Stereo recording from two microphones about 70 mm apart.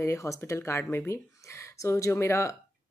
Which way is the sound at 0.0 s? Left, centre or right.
Left.